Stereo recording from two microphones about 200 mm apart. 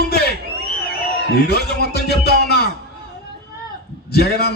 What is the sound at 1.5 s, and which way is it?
A man's voice, 55° left (ahead or behind).